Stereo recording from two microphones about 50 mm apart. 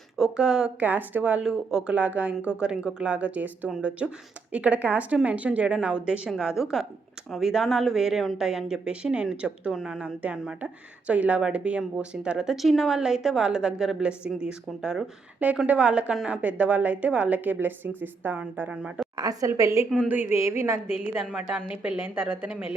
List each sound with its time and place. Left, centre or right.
0.2 s speech: centre
0.8 s a woman's voice: right
1.4 s speech: centre
1.9 s speech: right
6.6 s speech: centre
10.2 s speech: right
12.6 s a woman's voice: centre; by 18.3 s right
18.7 s speech: right
19.5 s a woman's voice: right
20.0 s a woman's voice: right
20.3 s a woman's voice: right
21.2 s speech: centre
21.7 s a woman's voice: right